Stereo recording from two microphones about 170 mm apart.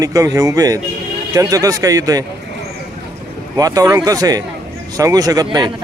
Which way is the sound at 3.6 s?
20° right (ahead or behind).